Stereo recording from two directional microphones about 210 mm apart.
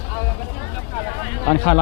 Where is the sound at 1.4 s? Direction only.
20° left (ahead or behind).